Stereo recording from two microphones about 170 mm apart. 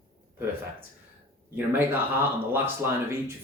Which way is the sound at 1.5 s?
10° right (ahead or behind).